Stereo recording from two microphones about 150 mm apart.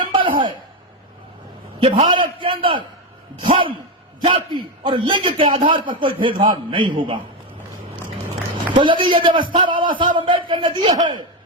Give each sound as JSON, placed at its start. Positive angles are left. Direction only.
{"t": 0.0, "sound": "a sound", "side_deg": -35}
{"t": 1.8, "sound": "a man's voice", "side_deg": -35}
{"t": 8.7, "sound": "a man's voice", "side_deg": -30}